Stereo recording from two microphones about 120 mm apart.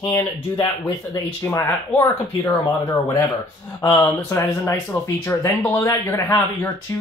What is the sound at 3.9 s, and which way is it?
Speech, 25° left (ahead or behind).